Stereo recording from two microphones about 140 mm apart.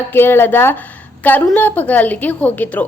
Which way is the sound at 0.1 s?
15° left (ahead or behind).